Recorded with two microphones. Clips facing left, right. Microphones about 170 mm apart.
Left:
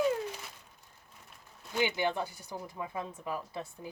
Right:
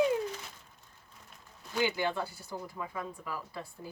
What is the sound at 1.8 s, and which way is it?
Speech, 20° left (ahead or behind).